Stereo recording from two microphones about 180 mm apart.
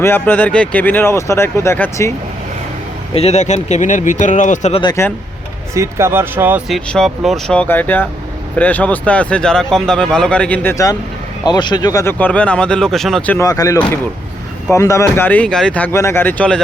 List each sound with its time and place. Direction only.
0.0 s speech: 10° left (ahead or behind)
3.2 s speech: 35° left (ahead or behind)
4.8 s speech: 20° left (ahead or behind)
5.7 s speech: 15° right (ahead or behind)
6.7 s speech: centre (ahead or behind)
13.4 s speech: 20° left (ahead or behind)